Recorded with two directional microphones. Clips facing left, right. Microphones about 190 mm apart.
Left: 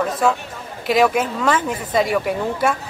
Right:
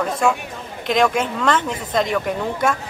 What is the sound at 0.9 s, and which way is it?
A woman's voice, 5° left (ahead or behind).